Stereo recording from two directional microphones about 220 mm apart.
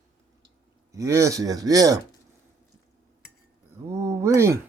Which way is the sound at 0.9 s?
15° right (ahead or behind).